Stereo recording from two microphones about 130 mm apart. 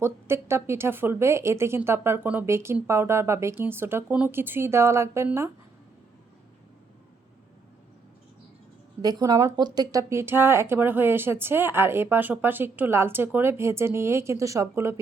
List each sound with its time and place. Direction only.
0.0 s speech: 20° right (ahead or behind)
9.0 s speech: 30° right (ahead or behind)